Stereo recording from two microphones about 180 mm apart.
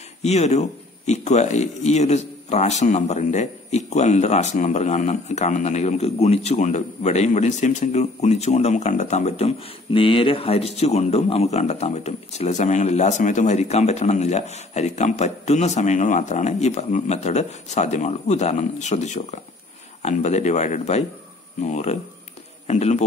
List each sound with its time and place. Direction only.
0.2 s a man's voice: 35° left (ahead or behind)